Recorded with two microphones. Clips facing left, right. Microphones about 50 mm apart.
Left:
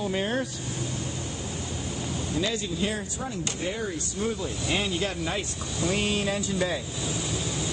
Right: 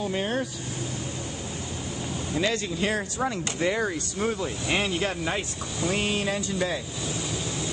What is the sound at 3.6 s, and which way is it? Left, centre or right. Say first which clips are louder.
Speech: right 7 dB; right.